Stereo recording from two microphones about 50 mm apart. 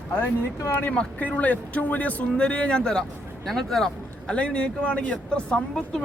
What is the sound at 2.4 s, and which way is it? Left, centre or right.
Speech, left.